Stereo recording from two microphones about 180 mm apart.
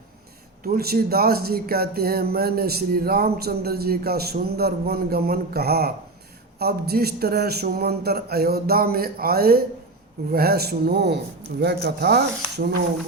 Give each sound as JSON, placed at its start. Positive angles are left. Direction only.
{"t": 0.6, "sound": "speech", "side_deg": -55}